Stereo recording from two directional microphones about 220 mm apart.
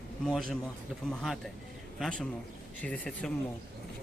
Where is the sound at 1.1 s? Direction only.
5° left (ahead or behind).